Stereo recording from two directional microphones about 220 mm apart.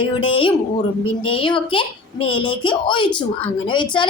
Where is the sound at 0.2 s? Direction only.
25° left (ahead or behind).